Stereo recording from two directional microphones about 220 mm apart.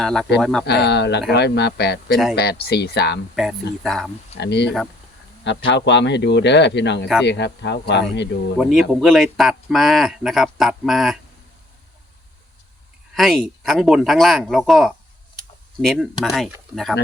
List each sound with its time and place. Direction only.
0.0 s speech: centre (ahead or behind)
0.6 s a man's voice: 50° left (ahead or behind)
3.3 s speech: centre (ahead or behind)
4.4 s a man's voice: 50° left (ahead or behind)
8.5 s speech: centre (ahead or behind)
13.1 s speech: centre (ahead or behind)